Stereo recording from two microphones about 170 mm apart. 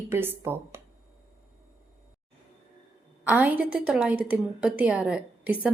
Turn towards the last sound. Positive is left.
turn(degrees=-10)  # may be behind; listen again after turning